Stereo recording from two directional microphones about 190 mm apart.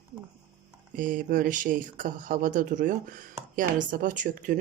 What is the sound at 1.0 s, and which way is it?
Speech, 45° right (ahead or behind).